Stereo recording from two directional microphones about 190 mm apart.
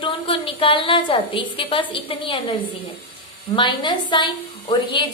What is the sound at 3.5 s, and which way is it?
A woman's voice, 25° left (ahead or behind).